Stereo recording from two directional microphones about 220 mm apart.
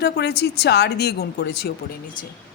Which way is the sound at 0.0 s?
50° left (ahead or behind).